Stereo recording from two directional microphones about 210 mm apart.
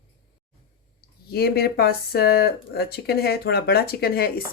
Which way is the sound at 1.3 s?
50° left (ahead or behind).